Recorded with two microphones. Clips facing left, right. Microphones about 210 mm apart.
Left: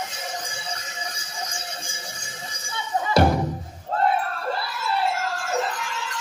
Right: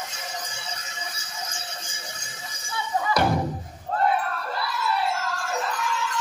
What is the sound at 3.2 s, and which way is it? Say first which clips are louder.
Music: left 6 dB; 25° left (ahead or behind).